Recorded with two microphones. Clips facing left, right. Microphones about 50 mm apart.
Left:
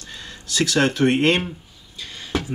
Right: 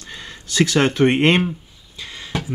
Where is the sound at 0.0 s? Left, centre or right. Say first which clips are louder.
Right 2 dB; right.